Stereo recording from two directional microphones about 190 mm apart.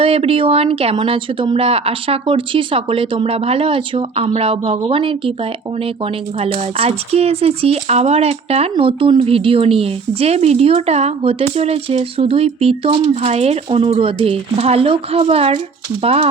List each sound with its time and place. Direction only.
0.0 s speech: 30° right (ahead or behind)
6.4 s speech: 30° right (ahead or behind)